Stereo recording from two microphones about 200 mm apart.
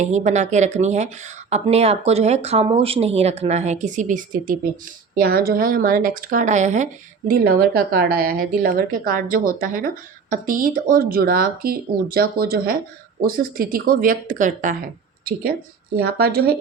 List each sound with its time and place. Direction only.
0.0 s a woman's voice: 35° right (ahead or behind)
7.3 s a woman's voice: 50° right (ahead or behind)
16.0 s a woman's voice: 50° right (ahead or behind)